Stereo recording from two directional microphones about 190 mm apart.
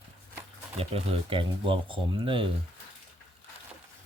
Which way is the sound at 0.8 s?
30° right (ahead or behind).